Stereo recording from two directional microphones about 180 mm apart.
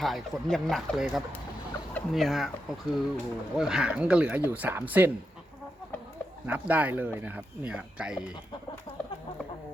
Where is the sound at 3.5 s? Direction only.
5° right (ahead or behind).